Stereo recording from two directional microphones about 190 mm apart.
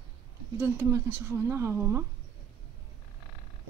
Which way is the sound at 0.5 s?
15° right (ahead or behind).